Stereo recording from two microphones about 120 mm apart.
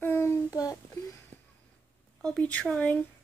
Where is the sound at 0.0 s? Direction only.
20° left (ahead or behind).